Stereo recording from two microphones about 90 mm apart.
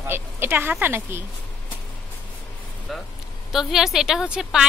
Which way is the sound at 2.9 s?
Centre (ahead or behind).